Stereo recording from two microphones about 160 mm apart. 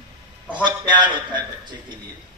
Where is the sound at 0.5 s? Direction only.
30° right (ahead or behind).